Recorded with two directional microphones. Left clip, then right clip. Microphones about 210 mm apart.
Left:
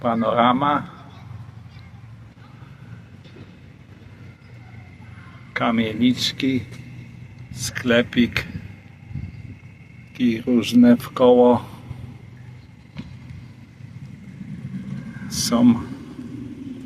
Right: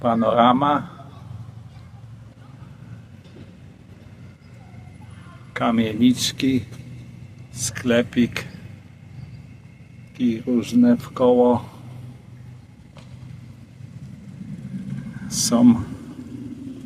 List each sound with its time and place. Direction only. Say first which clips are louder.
0.0 s speech: right 2 dB; 15° right (ahead or behind)
5.5 s speech: even; 10° right (ahead or behind)
10.2 s speech: left 2 dB; 5° left (ahead or behind)
15.3 s a sound: right 1 dB; 15° right (ahead or behind)